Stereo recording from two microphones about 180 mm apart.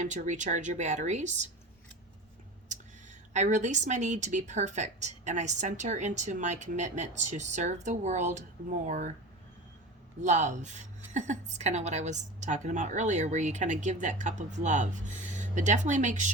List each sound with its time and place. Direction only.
0.0 s a woman's voice: 45° right (ahead or behind)
3.3 s a woman's voice: 40° right (ahead or behind)
10.2 s a woman's voice: 40° right (ahead or behind)